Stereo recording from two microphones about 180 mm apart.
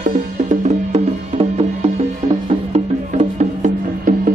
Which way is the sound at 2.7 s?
40° right (ahead or behind).